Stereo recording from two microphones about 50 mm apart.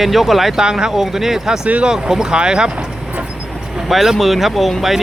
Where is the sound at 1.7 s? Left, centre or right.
Right.